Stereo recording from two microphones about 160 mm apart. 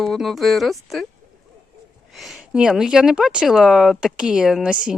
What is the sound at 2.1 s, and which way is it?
Speech, centre (ahead or behind).